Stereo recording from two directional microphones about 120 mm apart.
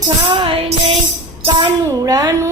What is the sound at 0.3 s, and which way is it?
Child singing, 50° right (ahead or behind).